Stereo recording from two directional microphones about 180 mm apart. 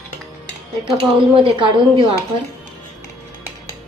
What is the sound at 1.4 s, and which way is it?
Speech, 25° right (ahead or behind).